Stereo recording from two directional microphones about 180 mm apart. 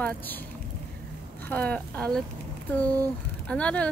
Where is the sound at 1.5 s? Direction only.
10° left (ahead or behind).